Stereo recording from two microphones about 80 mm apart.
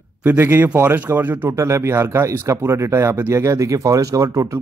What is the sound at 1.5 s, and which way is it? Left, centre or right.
Speech, right.